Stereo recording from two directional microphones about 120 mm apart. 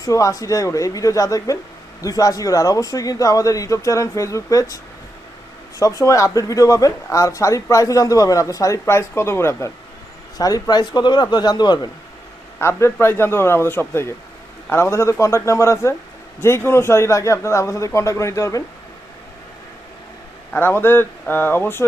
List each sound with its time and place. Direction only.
0.0 s speech: 30° left (ahead or behind)
5.8 s speech: 25° left (ahead or behind)
12.5 s speech: 20° left (ahead or behind)
20.5 s speech: 20° left (ahead or behind)